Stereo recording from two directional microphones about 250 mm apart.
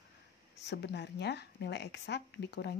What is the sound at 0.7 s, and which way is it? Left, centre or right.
Speech, left.